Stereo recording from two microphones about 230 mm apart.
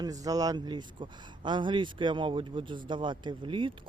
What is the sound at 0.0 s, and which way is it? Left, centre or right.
Speech, centre.